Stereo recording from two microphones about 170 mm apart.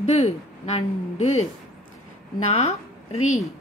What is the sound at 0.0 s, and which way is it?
Speech, 35° left (ahead or behind).